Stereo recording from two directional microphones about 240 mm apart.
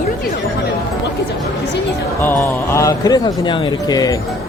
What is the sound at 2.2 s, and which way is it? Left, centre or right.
Speech, centre.